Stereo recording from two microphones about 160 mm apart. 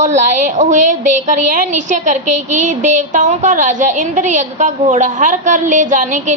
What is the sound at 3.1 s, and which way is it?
A woman's voice, 50° right (ahead or behind).